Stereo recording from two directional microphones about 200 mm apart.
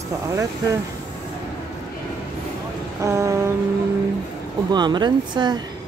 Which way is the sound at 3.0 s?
15° right (ahead or behind).